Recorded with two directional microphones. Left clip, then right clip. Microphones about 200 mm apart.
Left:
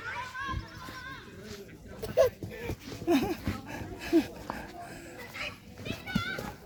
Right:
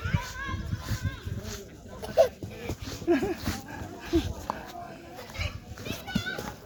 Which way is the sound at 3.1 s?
45° left (ahead or behind).